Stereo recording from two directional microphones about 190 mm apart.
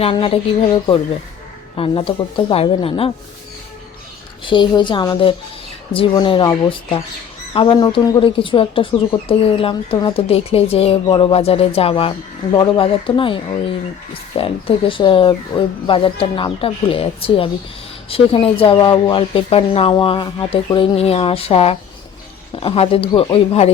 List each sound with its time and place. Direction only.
0.0 s speech: 30° left (ahead or behind)
1.7 s speech: 25° left (ahead or behind)
4.4 s speech: 25° left (ahead or behind)
7.5 s speech: 25° left (ahead or behind)